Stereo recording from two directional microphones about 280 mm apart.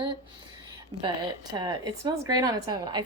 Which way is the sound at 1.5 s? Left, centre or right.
Centre.